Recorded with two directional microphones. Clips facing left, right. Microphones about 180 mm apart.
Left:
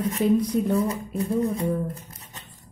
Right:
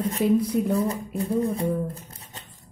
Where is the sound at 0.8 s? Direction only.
30° right (ahead or behind).